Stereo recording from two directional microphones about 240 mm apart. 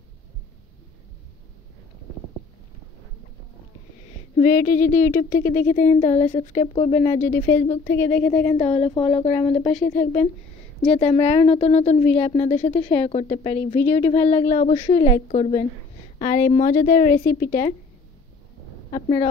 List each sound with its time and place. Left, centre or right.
4.4 s speech: left
8.1 s a woman's voice: centre
8.5 s speech: left
10.9 s speech: left
18.9 s speech: left